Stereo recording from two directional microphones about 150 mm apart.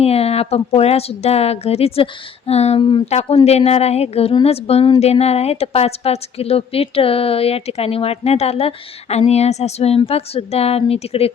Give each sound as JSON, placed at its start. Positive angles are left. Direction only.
{"t": 0.0, "sound": "a woman's voice", "side_deg": 40}